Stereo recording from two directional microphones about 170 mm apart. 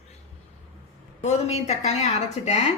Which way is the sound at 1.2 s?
40° left (ahead or behind).